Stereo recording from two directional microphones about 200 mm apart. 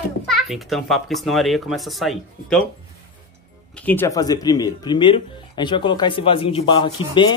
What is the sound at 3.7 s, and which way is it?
Speech, 10° left (ahead or behind).